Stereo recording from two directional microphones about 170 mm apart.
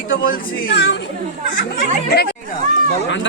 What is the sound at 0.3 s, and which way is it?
Speech, 75° left (ahead or behind).